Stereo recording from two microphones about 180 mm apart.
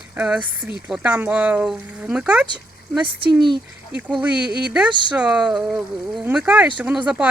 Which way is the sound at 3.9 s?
5° right (ahead or behind).